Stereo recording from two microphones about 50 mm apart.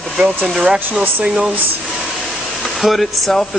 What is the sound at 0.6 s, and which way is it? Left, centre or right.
Speech, centre.